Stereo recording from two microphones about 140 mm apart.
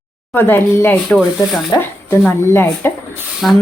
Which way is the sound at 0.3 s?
15° left (ahead or behind).